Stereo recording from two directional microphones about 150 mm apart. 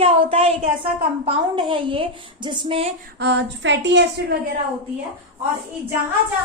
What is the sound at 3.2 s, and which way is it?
Speech, 90° right.